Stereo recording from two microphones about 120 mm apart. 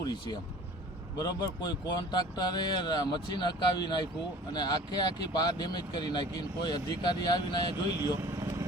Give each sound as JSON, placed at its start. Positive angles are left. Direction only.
{"t": 0.0, "sound": "speech", "side_deg": 35}